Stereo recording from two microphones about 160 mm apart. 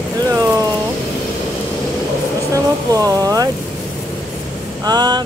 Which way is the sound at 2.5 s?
20° right (ahead or behind).